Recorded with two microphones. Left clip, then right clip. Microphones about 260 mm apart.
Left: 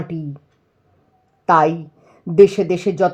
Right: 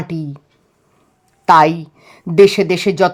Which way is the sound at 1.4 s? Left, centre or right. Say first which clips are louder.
Right 5 dB; right.